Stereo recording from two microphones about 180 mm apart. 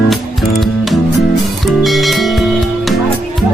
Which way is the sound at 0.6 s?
Centre (ahead or behind).